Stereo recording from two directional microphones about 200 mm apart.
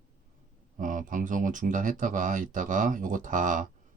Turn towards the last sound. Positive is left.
turn(degrees=-40)  # may be behind; listen again after turning